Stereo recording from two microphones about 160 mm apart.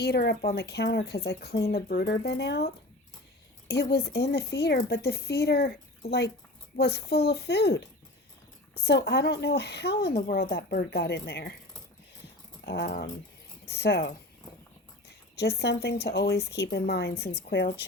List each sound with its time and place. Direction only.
0.0 s a woman's voice: 90° left
1.7 s a woman's voice: 75° left (ahead or behind)
3.7 s a woman's voice: 90° left
8.8 s a woman's voice: 90° left
12.6 s a woman's voice: 90° left
15.4 s a woman's voice: 90° left
17.4 s a woman's voice: 65° left (ahead or behind)